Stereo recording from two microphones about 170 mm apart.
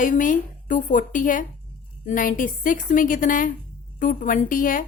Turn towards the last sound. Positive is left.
turn(degrees=50)  # may be behind; listen again after turning